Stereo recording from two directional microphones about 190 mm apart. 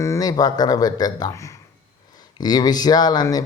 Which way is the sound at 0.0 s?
15° left (ahead or behind).